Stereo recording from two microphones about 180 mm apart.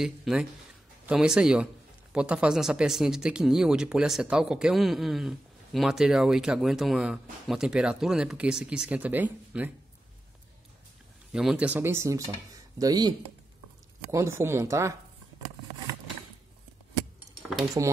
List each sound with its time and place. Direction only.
0.0 s speech: centre (ahead or behind)
11.3 s speech: 5° right (ahead or behind); by 13.1 s 20° right (ahead or behind)
14.1 s speech: 15° right (ahead or behind)
17.8 s speech: 20° right (ahead or behind)